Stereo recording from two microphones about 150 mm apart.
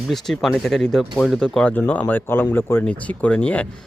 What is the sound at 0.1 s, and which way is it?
Speech, centre (ahead or behind).